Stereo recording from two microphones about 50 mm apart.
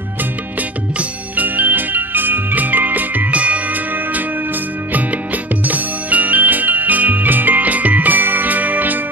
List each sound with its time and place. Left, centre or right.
0.6 s music: right